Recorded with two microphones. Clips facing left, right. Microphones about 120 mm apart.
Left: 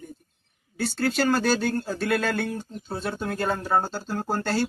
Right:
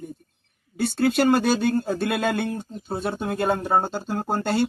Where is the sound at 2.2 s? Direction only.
20° right (ahead or behind).